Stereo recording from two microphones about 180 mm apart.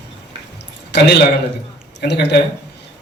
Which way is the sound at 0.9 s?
70° left (ahead or behind).